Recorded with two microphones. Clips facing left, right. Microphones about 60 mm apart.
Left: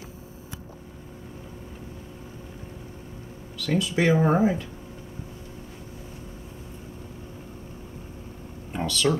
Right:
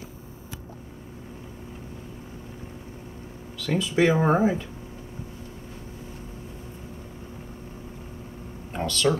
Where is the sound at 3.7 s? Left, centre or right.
Centre.